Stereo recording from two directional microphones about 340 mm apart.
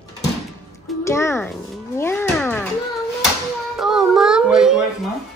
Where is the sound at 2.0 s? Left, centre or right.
Centre.